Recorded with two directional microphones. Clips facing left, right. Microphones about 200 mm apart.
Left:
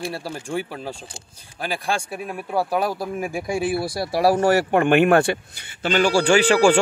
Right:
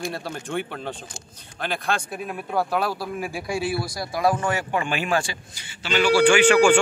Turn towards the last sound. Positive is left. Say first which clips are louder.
# even
turn(degrees=35)  # may be behind; listen again after turning